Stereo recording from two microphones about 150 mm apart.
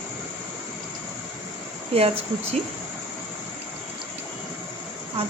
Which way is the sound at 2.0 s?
40° right (ahead or behind).